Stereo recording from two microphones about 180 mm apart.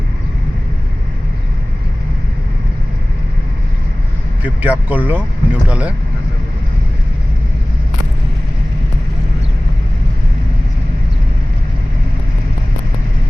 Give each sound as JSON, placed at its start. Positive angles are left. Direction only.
{"t": 4.4, "sound": "speech", "side_deg": -10}